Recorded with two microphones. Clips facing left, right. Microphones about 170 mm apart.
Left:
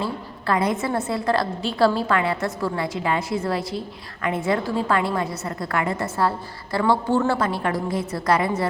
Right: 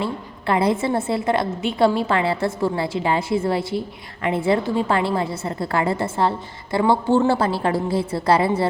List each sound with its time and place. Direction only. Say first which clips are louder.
0.0 s a woman's voice: right 2 dB; 25° right (ahead or behind)